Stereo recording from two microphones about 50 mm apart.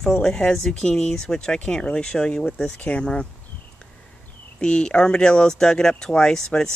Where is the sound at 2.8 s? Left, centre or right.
Left.